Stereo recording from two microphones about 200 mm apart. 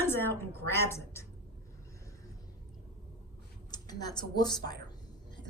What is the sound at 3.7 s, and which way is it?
Speech, 20° left (ahead or behind).